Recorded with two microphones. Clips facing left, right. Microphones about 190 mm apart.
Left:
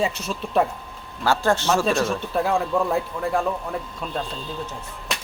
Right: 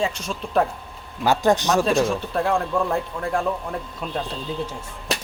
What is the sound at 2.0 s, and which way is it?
Speech, centre (ahead or behind).